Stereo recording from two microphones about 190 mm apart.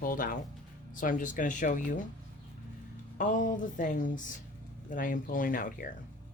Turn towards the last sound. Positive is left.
turn(degrees=45)  # may be behind; listen again after turning